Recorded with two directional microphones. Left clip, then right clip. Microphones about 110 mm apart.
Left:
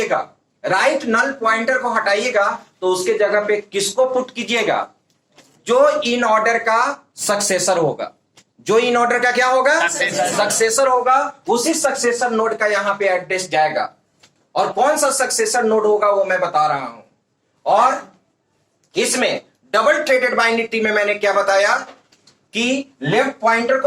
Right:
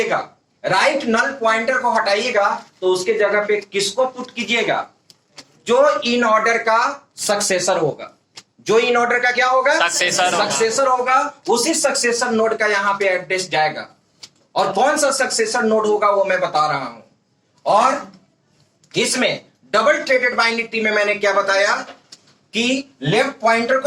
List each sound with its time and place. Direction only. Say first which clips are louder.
0.0 s speech: even; 20° left (ahead or behind)
11.0 s speech: left 1 dB; 15° left (ahead or behind)